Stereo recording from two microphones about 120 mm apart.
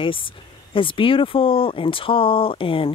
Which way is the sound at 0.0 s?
45° left (ahead or behind).